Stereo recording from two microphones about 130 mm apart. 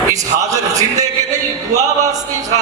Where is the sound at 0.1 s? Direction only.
25° right (ahead or behind).